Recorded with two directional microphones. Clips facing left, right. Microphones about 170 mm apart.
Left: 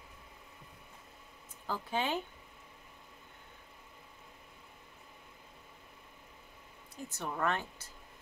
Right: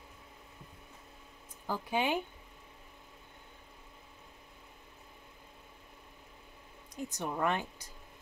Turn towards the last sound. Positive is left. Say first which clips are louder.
# right 2 dB
turn(degrees=-15)  # may be behind; listen again after turning